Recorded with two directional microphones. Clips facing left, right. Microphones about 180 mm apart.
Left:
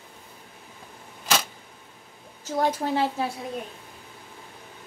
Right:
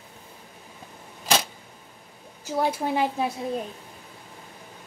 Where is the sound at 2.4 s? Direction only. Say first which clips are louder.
Even; 10° right (ahead or behind).